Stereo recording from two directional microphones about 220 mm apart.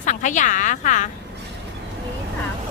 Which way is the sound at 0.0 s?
35° left (ahead or behind).